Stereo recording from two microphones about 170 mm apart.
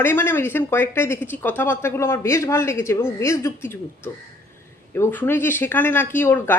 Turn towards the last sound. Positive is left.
turn(degrees=10)  # may be behind; listen again after turning